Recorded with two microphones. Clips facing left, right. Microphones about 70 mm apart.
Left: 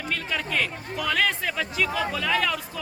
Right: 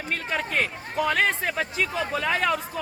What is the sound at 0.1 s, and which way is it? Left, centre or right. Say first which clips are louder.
Speech: right 1 dB; right.